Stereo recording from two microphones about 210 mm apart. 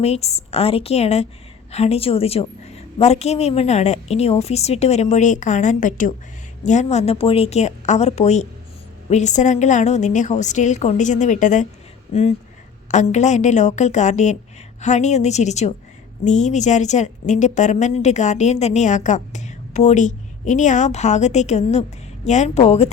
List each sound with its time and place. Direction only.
0.0 s a woman's voice: 30° left (ahead or behind)
12.9 s a woman's voice: 35° left (ahead or behind)